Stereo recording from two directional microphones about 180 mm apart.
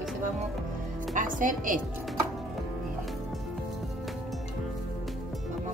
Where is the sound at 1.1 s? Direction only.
50° right (ahead or behind).